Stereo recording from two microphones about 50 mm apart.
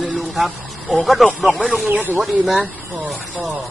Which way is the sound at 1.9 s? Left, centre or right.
Right.